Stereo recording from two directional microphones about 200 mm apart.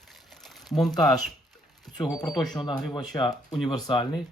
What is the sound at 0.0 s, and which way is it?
Crumpling, centre (ahead or behind).